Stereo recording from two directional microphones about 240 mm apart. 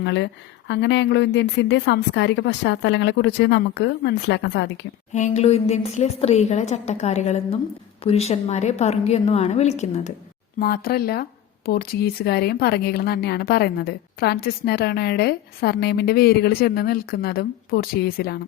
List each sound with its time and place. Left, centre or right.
0.0 s a woman's voice: left
5.1 s a woman's voice: left
10.6 s speech: left